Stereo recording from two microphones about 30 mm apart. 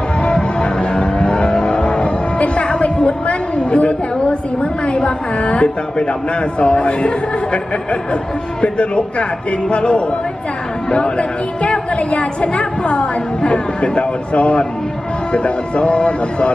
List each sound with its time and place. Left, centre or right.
0.2 s music: left
6.6 s a woman's voice: left